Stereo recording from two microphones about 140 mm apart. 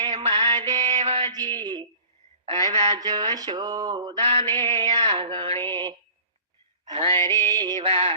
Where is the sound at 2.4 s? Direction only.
35° right (ahead or behind).